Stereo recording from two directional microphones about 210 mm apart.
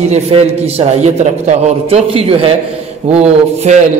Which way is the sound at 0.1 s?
30° right (ahead or behind).